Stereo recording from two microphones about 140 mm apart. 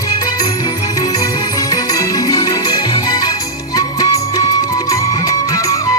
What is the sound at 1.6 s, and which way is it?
Music, 25° left (ahead or behind).